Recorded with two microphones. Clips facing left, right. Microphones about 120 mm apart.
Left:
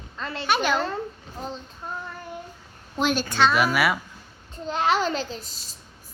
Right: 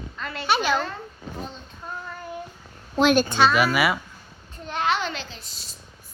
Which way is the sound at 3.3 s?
25° right (ahead or behind).